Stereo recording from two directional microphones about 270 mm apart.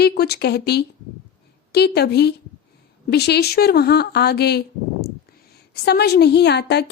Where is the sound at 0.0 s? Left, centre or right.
Left.